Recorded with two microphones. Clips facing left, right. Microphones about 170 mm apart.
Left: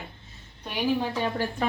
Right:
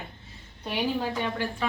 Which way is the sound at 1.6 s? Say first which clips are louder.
Left 3 dB; 45° left (ahead or behind).